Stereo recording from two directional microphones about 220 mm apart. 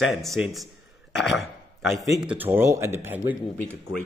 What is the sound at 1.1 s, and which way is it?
Cough, centre (ahead or behind).